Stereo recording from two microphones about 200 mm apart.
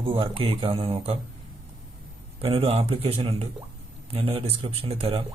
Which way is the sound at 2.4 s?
30° right (ahead or behind).